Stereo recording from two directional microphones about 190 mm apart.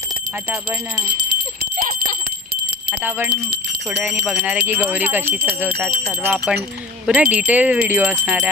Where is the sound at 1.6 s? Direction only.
50° right (ahead or behind).